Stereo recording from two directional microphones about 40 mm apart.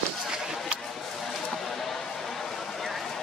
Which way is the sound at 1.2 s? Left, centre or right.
Centre.